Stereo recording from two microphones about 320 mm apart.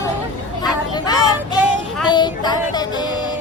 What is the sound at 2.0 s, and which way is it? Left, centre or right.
Child singing, centre.